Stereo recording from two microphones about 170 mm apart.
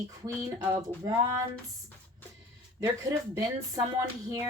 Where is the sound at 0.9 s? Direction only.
10° left (ahead or behind).